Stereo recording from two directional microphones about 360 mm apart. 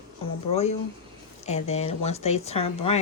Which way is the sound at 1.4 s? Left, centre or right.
Centre.